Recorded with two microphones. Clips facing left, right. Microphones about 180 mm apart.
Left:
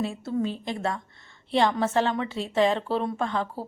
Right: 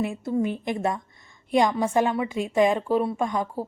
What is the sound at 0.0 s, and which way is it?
Speech, 15° right (ahead or behind).